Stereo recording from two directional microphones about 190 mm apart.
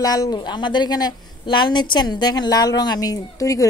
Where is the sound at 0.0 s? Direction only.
20° left (ahead or behind).